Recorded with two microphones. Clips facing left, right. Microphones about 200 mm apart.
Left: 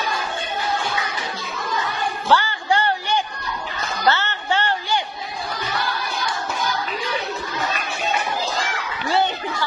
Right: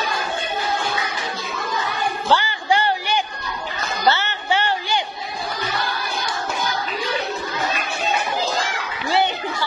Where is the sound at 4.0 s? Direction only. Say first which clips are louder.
Right 1 dB; 15° right (ahead or behind).